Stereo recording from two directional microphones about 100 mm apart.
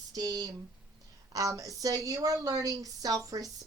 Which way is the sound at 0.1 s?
40° right (ahead or behind).